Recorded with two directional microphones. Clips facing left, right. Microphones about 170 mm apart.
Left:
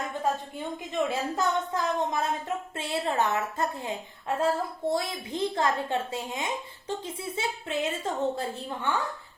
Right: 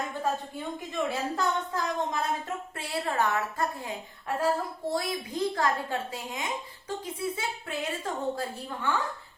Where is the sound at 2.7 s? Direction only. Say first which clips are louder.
Left 1 dB; 25° left (ahead or behind).